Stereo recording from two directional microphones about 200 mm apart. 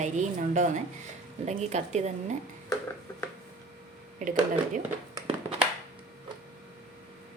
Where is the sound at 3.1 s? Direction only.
15° left (ahead or behind).